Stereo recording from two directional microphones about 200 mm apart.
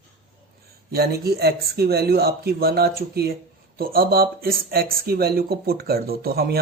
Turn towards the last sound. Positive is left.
turn(degrees=-50)  # may be behind; listen again after turning